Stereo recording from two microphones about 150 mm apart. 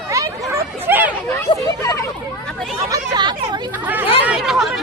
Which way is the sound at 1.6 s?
20° left (ahead or behind).